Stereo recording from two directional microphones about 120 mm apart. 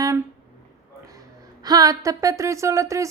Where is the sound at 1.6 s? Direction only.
30° right (ahead or behind).